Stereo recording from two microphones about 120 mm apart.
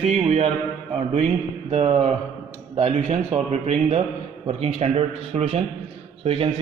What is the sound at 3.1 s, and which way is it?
A man's voice, 70° right (ahead or behind).